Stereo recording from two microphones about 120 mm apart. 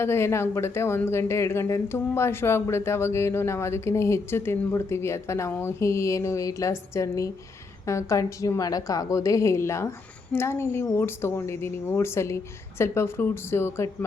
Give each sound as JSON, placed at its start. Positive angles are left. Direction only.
{"t": 0.0, "sound": "speech", "side_deg": 20}